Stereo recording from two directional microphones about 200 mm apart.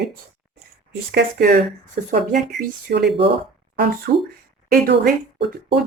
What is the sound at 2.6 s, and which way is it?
Speech, 55° right (ahead or behind).